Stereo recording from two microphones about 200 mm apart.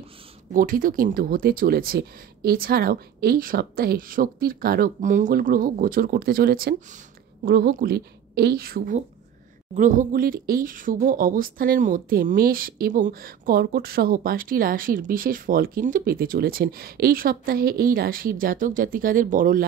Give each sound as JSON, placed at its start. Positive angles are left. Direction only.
{"t": 0.5, "sound": "speech", "side_deg": -45}